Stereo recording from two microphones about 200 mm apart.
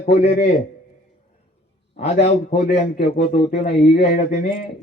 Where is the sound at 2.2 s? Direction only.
50° left (ahead or behind).